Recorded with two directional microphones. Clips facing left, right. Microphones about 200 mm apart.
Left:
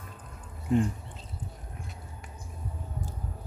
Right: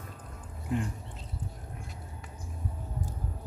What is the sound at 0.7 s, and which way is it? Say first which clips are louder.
Speech: left 7 dB; 30° left (ahead or behind).